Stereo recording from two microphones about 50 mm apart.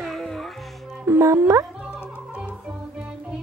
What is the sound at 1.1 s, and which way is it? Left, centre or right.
Music, right.